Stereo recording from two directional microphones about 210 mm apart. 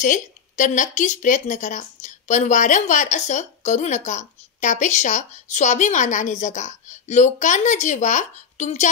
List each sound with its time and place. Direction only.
0.0 s speech: 35° left (ahead or behind)